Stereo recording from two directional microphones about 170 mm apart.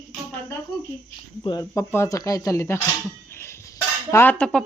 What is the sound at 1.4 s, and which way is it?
Speech, 20° left (ahead or behind).